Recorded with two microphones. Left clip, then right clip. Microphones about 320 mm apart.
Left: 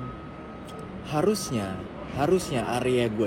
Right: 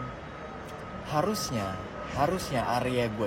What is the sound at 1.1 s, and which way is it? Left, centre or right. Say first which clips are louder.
Speech: left 3 dB; right.